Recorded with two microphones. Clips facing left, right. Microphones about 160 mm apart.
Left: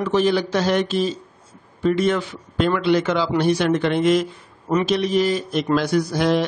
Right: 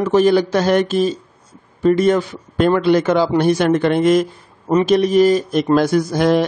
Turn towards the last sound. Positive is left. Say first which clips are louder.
# right 4 dB
turn(degrees=-50)  # may be behind; listen again after turning